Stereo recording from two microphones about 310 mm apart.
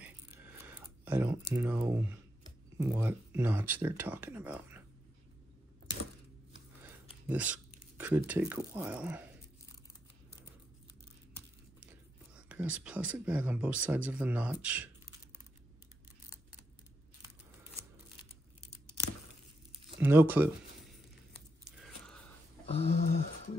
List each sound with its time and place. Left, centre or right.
0.0 s computer keyboard: centre
2.8 s speech: centre
6.8 s speech: centre
12.4 s speech: centre
19.7 s a sound: centre
22.7 s a sound: centre